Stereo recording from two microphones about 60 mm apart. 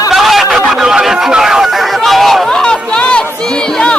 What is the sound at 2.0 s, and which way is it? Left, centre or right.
Chatter, centre.